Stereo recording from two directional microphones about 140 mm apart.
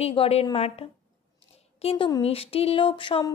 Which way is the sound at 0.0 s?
45° left (ahead or behind).